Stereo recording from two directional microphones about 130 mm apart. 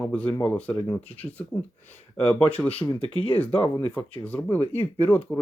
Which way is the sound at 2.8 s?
15° left (ahead or behind).